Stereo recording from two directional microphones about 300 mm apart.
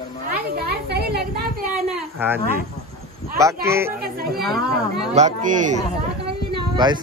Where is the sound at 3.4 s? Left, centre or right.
Centre.